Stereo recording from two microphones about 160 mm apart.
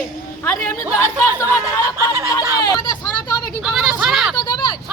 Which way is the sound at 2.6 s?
25° left (ahead or behind).